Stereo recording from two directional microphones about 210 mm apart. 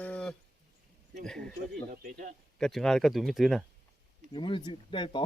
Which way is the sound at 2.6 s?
Centre (ahead or behind).